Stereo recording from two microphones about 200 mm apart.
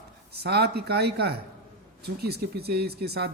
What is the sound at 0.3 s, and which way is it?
Speech, 55° right (ahead or behind).